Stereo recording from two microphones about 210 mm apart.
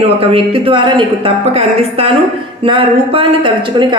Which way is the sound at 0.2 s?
25° right (ahead or behind).